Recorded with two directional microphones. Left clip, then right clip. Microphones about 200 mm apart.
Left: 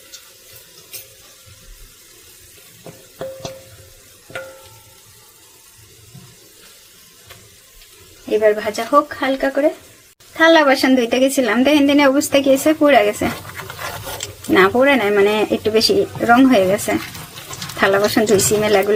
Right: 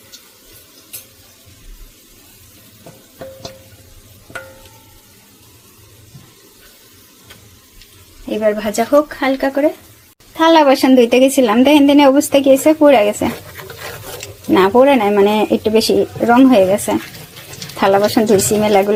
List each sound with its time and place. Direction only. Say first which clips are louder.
8.4 s a woman's voice: right 3 dB; 20° right (ahead or behind)
10.3 s a woman's voice: right 2 dB; 10° right (ahead or behind)
14.5 s speech: right 3 dB; 5° right (ahead or behind)